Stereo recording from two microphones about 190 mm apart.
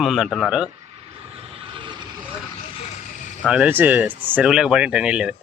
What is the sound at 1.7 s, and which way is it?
Vehicle, 25° right (ahead or behind).